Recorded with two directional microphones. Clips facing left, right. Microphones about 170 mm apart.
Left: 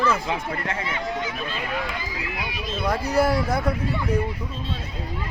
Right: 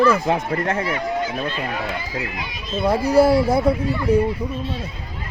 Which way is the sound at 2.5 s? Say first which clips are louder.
Right 6 dB; 40° right (ahead or behind).